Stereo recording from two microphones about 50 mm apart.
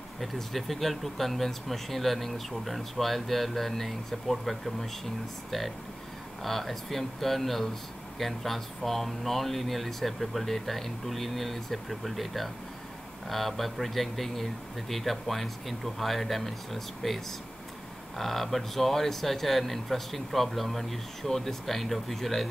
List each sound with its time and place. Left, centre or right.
0.2 s speech: centre
6.4 s speech: centre